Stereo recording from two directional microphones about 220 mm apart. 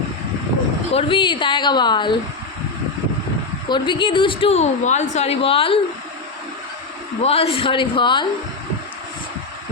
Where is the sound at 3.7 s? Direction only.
20° left (ahead or behind).